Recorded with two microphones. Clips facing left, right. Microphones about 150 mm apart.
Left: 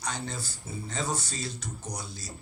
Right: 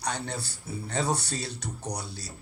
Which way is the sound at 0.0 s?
65° right (ahead or behind).